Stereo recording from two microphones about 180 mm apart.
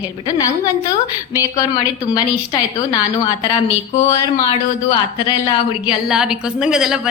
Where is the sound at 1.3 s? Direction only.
20° left (ahead or behind).